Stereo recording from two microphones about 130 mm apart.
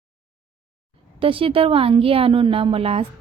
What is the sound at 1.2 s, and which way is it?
A woman's voice, 45° right (ahead or behind).